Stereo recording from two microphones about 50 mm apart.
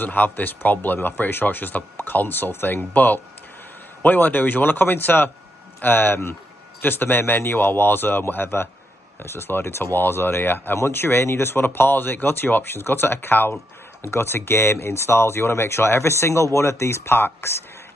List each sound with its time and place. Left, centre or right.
0.0 s speech: left